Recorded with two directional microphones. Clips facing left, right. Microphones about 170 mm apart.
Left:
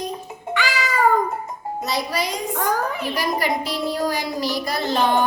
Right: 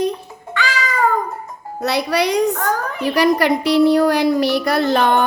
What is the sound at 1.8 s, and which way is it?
A child's voice, 70° right (ahead or behind).